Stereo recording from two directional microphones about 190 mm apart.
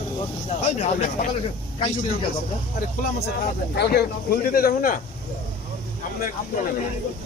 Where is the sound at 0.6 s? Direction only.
40° left (ahead or behind).